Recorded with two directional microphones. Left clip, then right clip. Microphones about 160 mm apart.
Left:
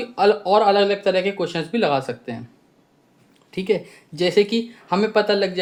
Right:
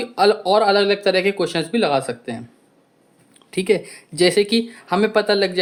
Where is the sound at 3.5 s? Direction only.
30° right (ahead or behind).